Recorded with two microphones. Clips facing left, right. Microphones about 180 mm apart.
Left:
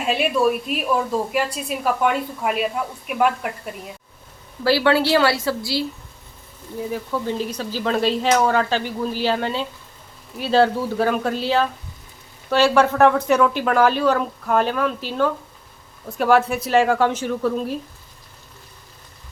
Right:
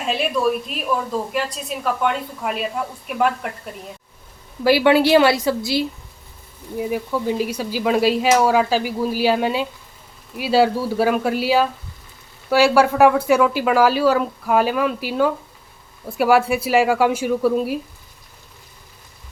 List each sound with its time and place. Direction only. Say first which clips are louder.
0.1 s a woman's voice: left 1 dB; 5° left (ahead or behind)
4.6 s speech: right 3 dB; 15° right (ahead or behind)